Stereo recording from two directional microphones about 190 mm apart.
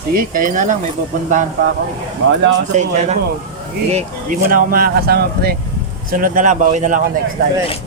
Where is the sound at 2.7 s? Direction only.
40° right (ahead or behind).